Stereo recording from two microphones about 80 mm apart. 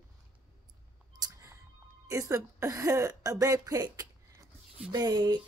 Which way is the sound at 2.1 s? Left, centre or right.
Right.